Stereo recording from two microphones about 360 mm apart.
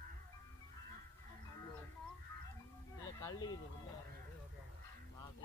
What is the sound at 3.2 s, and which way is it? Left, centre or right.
Speech, centre.